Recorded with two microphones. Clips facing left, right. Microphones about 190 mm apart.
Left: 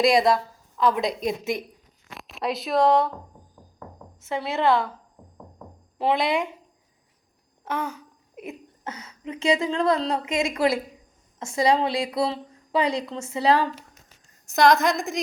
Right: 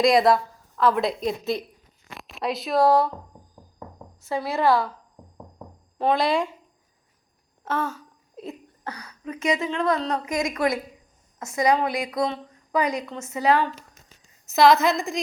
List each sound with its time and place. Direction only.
0.0 s a woman's voice: centre (ahead or behind)
1.2 s a woman's voice: 15° left (ahead or behind)
2.0 s a sound: centre (ahead or behind)
4.2 s a woman's voice: 20° left (ahead or behind)
6.1 s a woman's voice: 20° left (ahead or behind)
7.6 s a woman's voice: 15° left (ahead or behind); by 13.7 s 35° left (ahead or behind)
14.4 s a woman's voice: 5° right (ahead or behind)